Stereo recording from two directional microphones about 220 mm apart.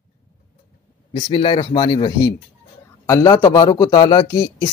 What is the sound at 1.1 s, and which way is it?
Speech, 25° left (ahead or behind).